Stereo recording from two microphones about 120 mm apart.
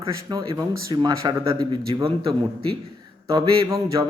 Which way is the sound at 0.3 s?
35° right (ahead or behind).